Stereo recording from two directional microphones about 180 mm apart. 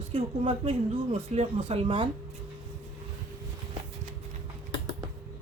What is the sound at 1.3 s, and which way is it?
Speech, 35° right (ahead or behind).